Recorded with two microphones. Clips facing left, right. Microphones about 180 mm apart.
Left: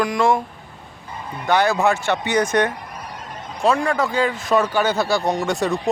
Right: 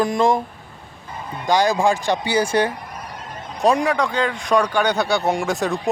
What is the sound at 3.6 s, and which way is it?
Speech, 15° right (ahead or behind).